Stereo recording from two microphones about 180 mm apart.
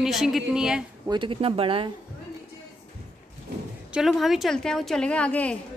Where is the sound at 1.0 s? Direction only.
25° right (ahead or behind).